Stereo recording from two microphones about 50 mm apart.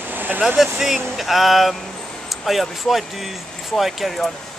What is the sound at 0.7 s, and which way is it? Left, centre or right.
Speech, centre.